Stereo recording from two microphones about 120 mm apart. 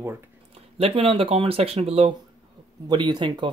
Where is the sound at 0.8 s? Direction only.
55° right (ahead or behind).